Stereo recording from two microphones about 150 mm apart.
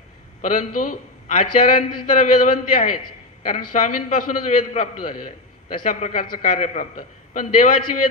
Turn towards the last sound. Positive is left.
turn(degrees=60)  # may be behind; listen again after turning